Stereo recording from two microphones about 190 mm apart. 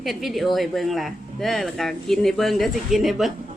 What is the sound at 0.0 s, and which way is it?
Speech, centre (ahead or behind).